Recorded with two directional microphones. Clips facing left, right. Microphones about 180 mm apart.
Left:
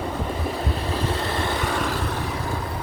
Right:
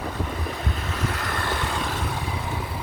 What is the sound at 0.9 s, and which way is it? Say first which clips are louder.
Vehicle: left 3 dB; 30° left (ahead or behind).